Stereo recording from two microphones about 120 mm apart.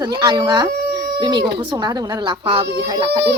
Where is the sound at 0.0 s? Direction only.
35° right (ahead or behind).